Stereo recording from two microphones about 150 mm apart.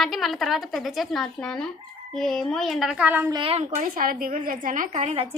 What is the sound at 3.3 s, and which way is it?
Speech, 40° right (ahead or behind).